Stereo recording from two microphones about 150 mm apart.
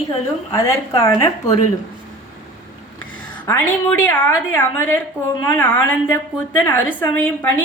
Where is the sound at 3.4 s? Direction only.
15° left (ahead or behind).